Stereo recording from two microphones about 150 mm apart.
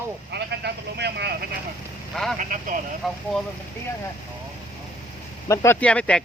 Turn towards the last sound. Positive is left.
turn(degrees=5)  # may be behind; listen again after turning